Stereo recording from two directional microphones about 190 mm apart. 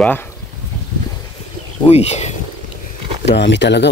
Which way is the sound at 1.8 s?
35° left (ahead or behind).